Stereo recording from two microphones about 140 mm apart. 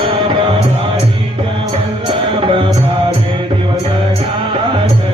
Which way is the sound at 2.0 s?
35° right (ahead or behind).